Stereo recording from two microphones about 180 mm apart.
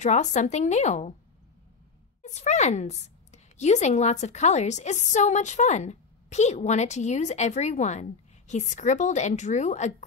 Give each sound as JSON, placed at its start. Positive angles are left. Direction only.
{"t": 0.0, "sound": "a woman's voice", "side_deg": 40}
{"t": 2.2, "sound": "a woman's voice", "side_deg": 40}